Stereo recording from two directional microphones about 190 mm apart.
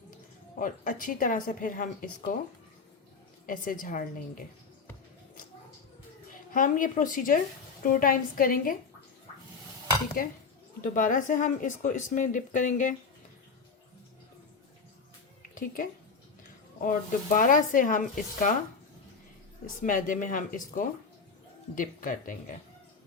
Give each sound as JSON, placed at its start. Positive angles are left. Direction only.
{"t": 0.6, "sound": "speech", "side_deg": 45}
{"t": 3.4, "sound": "speech", "side_deg": 45}
{"t": 6.5, "sound": "speech", "side_deg": 45}
{"t": 10.2, "sound": "speech", "side_deg": 45}
{"t": 15.5, "sound": "speech", "side_deg": 45}
{"t": 19.6, "sound": "speech", "side_deg": 45}